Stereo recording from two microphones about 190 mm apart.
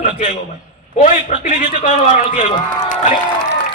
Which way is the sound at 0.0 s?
45° left (ahead or behind).